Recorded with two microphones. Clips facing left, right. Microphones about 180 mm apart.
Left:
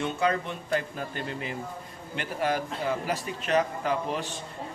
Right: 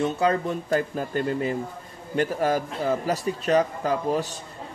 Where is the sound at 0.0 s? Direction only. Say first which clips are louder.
Right 4 dB; 35° right (ahead or behind).